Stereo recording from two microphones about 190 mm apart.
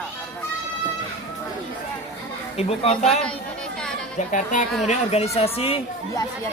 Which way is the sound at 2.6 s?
35° left (ahead or behind).